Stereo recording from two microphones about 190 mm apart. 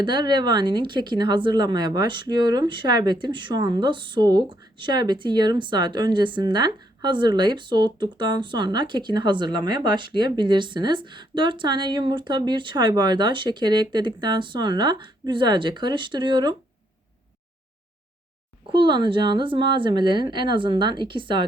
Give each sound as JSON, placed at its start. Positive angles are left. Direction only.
{"t": 0.0, "sound": "speech", "side_deg": -25}
{"t": 18.7, "sound": "speech", "side_deg": -25}